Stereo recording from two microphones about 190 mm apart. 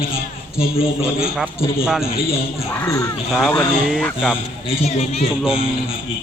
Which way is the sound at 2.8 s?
15° left (ahead or behind).